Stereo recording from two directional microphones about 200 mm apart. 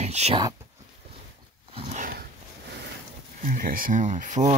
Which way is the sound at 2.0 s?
45° right (ahead or behind).